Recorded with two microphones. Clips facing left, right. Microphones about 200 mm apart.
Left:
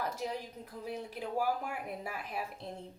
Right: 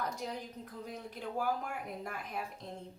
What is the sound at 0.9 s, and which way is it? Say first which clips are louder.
Speech: left 3 dB; 10° left (ahead or behind).